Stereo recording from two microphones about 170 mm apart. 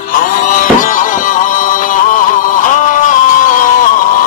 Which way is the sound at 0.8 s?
50° left (ahead or behind).